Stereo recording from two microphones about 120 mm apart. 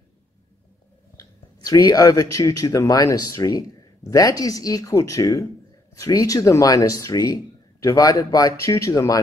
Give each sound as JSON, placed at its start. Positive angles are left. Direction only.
{"t": 1.1, "sound": "speech", "side_deg": 30}